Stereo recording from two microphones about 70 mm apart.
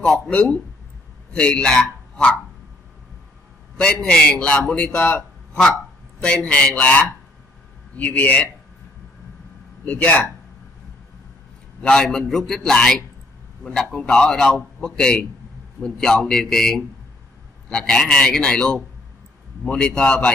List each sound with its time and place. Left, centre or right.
0.3 s speech: centre
3.7 s a man's voice: centre
9.8 s speech: left
11.8 s a man's voice: centre